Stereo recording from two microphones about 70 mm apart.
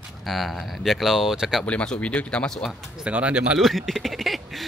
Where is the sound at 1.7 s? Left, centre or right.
Centre.